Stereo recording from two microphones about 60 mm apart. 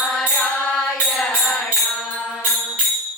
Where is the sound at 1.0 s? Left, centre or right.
Centre.